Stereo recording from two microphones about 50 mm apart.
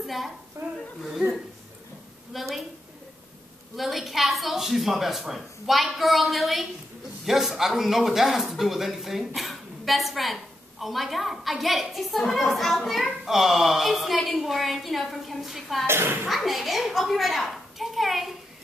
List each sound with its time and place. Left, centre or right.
0.0 s a woman's voice: centre
0.6 s speech: right
2.3 s speech: centre
3.7 s speech: centre
15.9 s speech: right
16.3 s speech: centre